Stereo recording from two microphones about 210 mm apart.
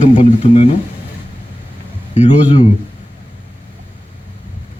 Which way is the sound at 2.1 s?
35° left (ahead or behind).